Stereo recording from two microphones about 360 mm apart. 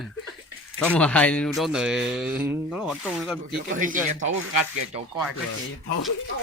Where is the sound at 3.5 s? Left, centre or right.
Right.